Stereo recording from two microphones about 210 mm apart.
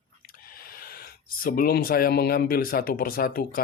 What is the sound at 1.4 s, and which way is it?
Speech, 45° left (ahead or behind).